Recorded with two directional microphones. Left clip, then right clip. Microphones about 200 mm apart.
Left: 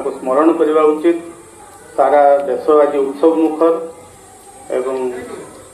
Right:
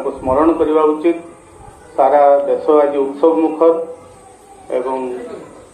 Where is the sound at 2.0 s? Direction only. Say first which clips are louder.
Even; 50° left (ahead or behind).